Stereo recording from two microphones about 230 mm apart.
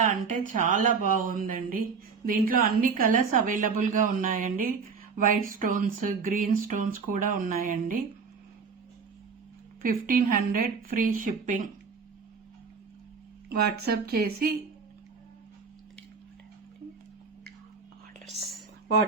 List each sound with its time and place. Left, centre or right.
0.1 s speech: right
9.8 s speech: right
13.5 s speech: right